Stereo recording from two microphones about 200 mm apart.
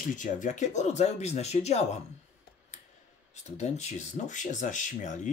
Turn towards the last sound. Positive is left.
turn(degrees=40)  # may be behind; listen again after turning